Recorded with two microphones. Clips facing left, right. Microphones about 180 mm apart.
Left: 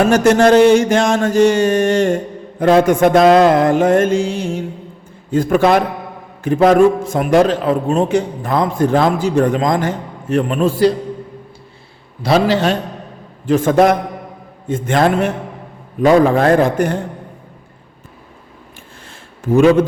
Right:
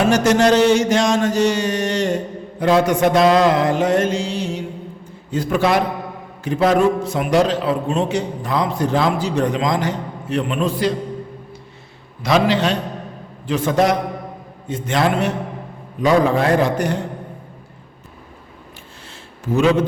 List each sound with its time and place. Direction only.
0.1 s a man's voice: 50° left (ahead or behind)
12.2 s a man's voice: 35° left (ahead or behind)
13.5 s a man's voice: 50° left (ahead or behind)
19.5 s a man's voice: 50° left (ahead or behind)